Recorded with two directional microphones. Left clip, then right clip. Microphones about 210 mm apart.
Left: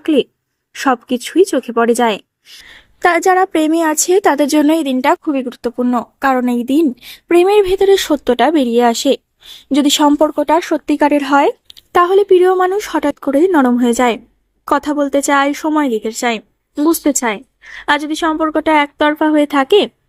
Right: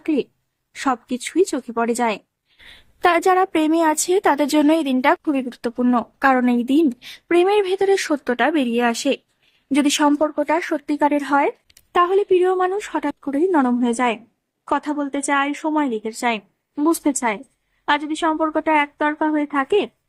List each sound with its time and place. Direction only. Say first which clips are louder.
0.0 s a woman's voice: left 8 dB; 25° left (ahead or behind)